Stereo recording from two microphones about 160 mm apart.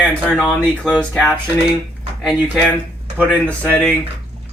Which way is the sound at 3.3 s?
10° left (ahead or behind).